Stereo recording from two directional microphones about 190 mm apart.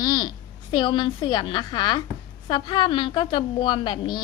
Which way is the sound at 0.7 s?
25° left (ahead or behind).